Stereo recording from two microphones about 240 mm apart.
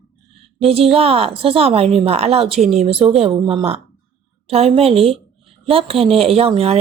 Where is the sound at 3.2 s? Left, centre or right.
Right.